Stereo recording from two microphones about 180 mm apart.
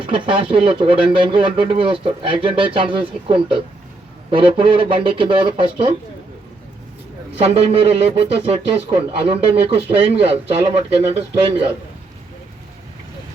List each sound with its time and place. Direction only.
0.0 s speech: 30° right (ahead or behind)
7.4 s speech: 30° right (ahead or behind)